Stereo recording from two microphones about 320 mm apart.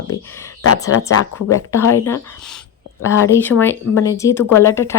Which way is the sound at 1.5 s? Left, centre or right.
Centre.